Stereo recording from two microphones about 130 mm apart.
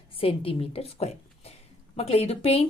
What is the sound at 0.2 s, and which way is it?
A woman's voice, 45° left (ahead or behind).